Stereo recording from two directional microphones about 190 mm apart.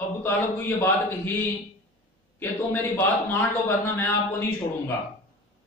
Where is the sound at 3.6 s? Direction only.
10° left (ahead or behind).